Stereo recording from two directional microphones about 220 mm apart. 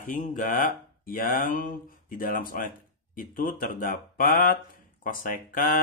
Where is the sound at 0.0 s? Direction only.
35° left (ahead or behind).